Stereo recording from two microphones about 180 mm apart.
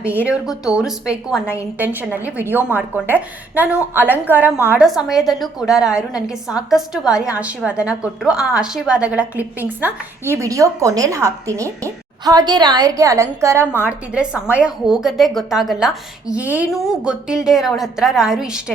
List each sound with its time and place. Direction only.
0.0 s speech: 10° left (ahead or behind)
0.3 s a woman's voice: 5° right (ahead or behind)